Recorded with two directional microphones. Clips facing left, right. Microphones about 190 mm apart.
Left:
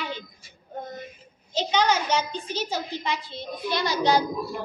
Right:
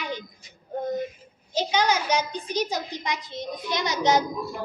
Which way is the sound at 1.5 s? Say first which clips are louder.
Even; 10° right (ahead or behind).